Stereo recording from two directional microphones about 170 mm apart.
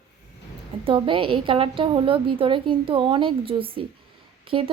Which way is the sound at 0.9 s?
30° right (ahead or behind).